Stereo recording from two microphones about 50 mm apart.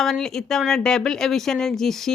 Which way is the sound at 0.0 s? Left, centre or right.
Centre.